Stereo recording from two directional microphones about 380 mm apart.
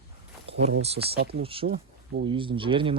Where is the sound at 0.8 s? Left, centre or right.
Centre.